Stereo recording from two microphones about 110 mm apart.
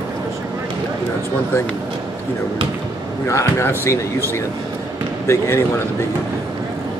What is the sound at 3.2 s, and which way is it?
Speech, 25° left (ahead or behind).